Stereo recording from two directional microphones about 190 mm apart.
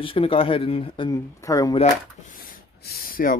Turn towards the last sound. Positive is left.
turn(degrees=45)  # may be behind; listen again after turning